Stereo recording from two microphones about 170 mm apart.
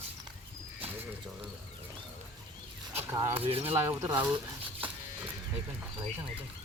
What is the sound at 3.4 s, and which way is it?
Speech, 35° right (ahead or behind).